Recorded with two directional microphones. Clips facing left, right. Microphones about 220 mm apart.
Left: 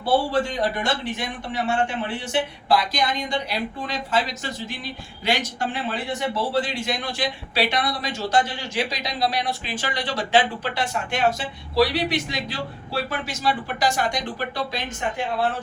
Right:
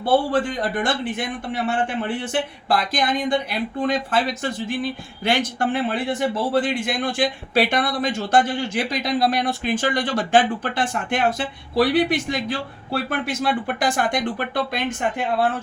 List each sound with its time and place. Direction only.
0.3 s a man's voice: 50° right (ahead or behind)